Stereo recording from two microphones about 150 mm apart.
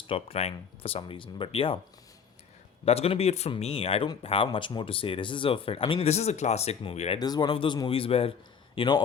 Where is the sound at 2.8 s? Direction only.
40° left (ahead or behind).